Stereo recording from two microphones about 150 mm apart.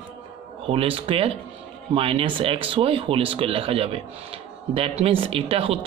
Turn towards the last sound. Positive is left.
turn(degrees=-40)  # may be behind; listen again after turning